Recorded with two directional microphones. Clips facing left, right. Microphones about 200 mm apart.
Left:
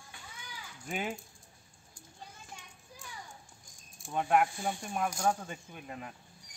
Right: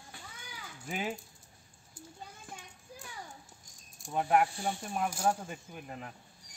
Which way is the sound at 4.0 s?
5° right (ahead or behind).